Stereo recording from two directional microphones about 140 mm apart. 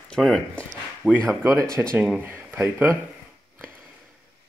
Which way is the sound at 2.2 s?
15° right (ahead or behind).